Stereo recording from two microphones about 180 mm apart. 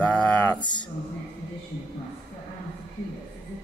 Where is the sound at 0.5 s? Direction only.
25° left (ahead or behind).